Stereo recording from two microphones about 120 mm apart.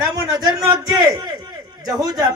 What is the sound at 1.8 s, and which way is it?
Speech, 30° right (ahead or behind).